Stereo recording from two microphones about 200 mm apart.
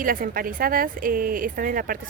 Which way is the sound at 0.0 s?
45° right (ahead or behind).